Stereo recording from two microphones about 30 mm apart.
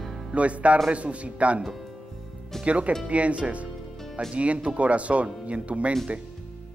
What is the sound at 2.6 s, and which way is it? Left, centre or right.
A man's voice, right.